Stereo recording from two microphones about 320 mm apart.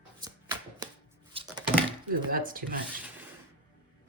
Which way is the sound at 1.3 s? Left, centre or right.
Centre.